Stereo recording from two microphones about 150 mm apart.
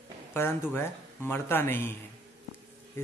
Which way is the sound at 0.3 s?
15° left (ahead or behind).